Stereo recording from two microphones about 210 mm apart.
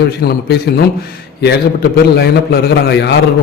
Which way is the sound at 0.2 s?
50° left (ahead or behind).